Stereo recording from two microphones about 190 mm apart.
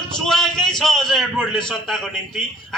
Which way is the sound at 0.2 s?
Centre (ahead or behind).